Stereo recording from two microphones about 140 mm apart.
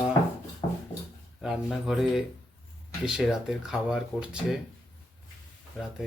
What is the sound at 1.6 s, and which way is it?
Speech, centre (ahead or behind).